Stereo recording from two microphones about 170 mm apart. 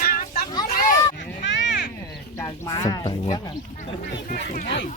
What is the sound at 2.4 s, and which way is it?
Speech, 20° left (ahead or behind).